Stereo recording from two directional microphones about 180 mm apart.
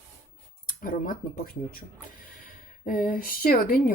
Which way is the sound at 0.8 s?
50° left (ahead or behind).